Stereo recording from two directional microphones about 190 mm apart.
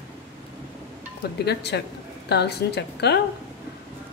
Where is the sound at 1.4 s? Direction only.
65° left (ahead or behind).